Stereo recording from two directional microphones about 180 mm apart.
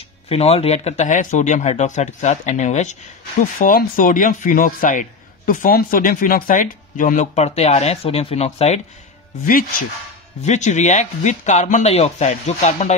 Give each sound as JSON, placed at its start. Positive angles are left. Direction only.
{"t": 0.3, "sound": "speech", "side_deg": 35}
{"t": 9.5, "sound": "speech", "side_deg": 50}